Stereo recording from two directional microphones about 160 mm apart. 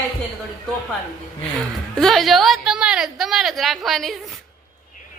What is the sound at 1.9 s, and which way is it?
A woman's voice, centre (ahead or behind).